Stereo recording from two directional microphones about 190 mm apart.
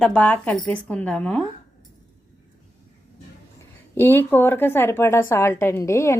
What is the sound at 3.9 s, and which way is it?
Speech, 10° left (ahead or behind).